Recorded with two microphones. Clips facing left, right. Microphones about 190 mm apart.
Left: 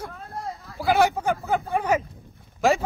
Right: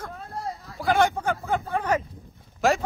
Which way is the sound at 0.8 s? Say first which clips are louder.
Left 1 dB; 5° left (ahead or behind).